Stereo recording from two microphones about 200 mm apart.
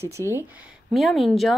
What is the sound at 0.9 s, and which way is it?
Speech, centre (ahead or behind).